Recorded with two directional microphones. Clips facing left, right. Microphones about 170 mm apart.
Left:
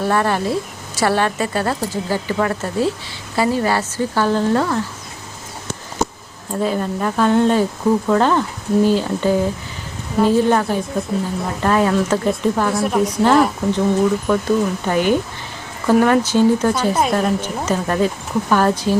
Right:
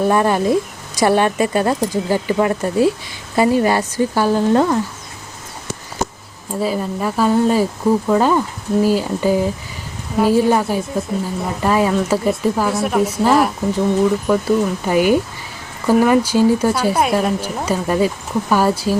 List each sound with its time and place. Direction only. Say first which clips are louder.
0.1 s speech: right 3 dB; 15° right (ahead or behind)
6.6 s speech: even; 5° right (ahead or behind)